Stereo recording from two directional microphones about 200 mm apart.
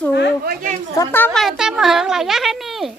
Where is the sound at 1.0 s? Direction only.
10° left (ahead or behind).